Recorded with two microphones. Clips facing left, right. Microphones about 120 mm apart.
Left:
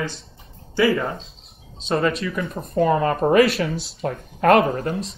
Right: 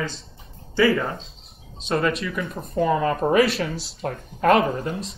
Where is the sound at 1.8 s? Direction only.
30° left (ahead or behind).